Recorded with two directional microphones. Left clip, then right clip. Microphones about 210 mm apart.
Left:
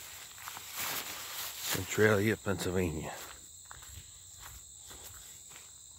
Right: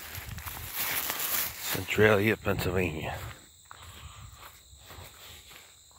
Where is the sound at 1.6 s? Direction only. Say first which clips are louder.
Right 2 dB; 25° right (ahead or behind).